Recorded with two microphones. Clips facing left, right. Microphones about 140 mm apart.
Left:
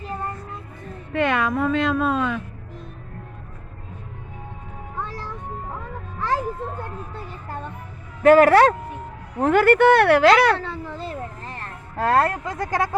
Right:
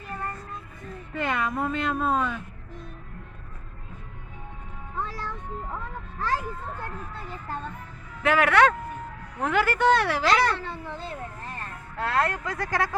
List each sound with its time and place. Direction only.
0.0 s child singing: 25° left (ahead or behind)
1.1 s speech: 75° left (ahead or behind)
8.2 s speech: 40° left (ahead or behind); by 10.8 s 80° left
11.9 s speech: 40° left (ahead or behind); by 12.9 s 20° left (ahead or behind)